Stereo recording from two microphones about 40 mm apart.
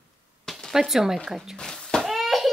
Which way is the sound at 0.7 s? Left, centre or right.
Centre.